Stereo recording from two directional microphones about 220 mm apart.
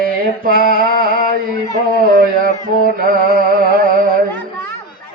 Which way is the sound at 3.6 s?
40° right (ahead or behind).